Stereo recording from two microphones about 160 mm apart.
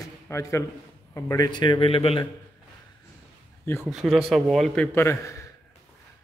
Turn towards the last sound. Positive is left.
turn(degrees=15)  # may be behind; listen again after turning